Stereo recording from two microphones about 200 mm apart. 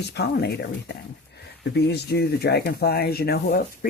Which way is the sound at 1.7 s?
55° left (ahead or behind).